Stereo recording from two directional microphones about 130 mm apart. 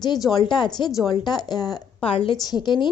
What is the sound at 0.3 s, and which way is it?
A woman's voice, 35° left (ahead or behind).